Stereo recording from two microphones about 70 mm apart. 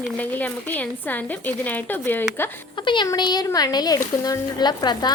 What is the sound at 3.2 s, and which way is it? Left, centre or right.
Speech, left.